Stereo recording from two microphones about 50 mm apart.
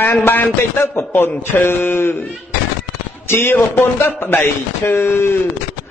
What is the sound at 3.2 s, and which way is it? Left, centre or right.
A man's voice, left.